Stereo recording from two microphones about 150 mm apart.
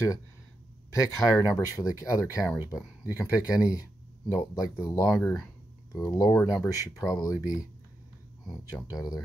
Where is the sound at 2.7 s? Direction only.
20° left (ahead or behind).